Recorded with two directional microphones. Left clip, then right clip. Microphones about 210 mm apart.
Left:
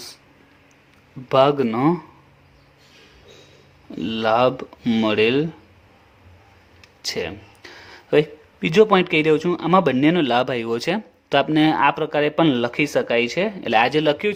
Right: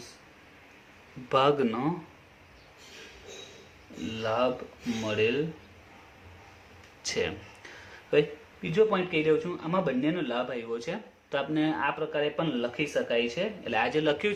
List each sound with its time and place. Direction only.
1.3 s speech: 35° left (ahead or behind)
4.1 s speech: 50° left (ahead or behind)
7.0 s speech: 40° left (ahead or behind)